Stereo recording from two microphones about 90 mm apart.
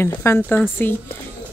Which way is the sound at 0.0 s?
25° left (ahead or behind).